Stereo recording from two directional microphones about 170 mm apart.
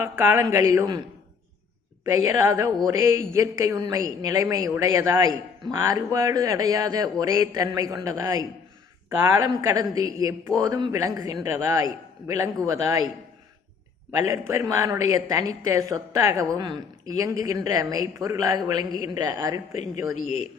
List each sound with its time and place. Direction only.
0.0 s a woman's voice: 15° right (ahead or behind)
2.4 s a woman's voice: 20° right (ahead or behind)
14.3 s speech: 15° right (ahead or behind)